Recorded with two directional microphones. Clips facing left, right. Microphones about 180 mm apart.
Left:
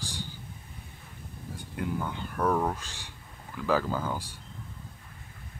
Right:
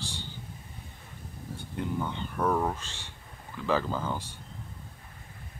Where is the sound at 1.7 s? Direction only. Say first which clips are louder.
Even; 5° left (ahead or behind).